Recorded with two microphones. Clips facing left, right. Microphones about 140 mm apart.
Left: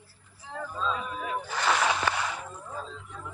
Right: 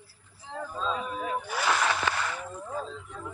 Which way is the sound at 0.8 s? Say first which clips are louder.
Right 1 dB; 30° right (ahead or behind).